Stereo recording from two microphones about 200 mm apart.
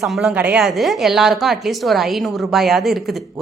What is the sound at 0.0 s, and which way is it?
A woman's voice, centre (ahead or behind).